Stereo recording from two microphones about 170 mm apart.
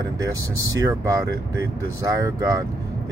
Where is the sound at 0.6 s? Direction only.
20° right (ahead or behind).